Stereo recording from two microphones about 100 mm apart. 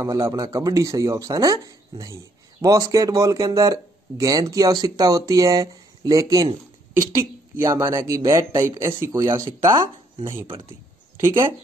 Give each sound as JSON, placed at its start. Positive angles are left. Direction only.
{"t": 0.1, "sound": "a woman's voice", "side_deg": -40}